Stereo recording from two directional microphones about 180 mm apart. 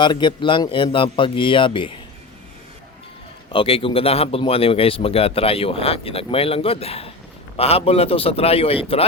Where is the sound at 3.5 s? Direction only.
30° left (ahead or behind).